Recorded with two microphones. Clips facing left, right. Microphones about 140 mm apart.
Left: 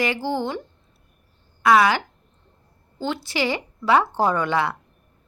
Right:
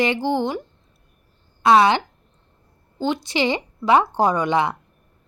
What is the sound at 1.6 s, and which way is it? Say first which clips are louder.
Speech: right 2 dB; 25° right (ahead or behind).